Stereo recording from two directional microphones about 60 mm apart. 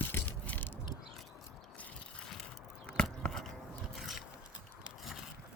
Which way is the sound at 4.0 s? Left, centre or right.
Centre.